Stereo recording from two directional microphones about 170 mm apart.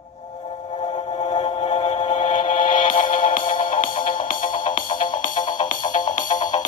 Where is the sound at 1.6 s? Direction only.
45° left (ahead or behind).